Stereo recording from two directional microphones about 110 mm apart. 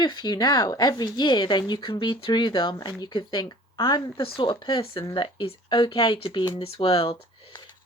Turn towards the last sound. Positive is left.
turn(degrees=50)  # may be behind; listen again after turning